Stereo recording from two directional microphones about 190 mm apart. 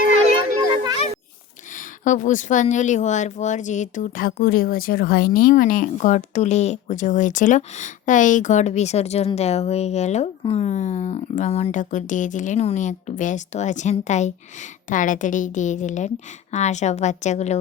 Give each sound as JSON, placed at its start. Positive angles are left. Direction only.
{"t": 1.7, "sound": "speech", "side_deg": 40}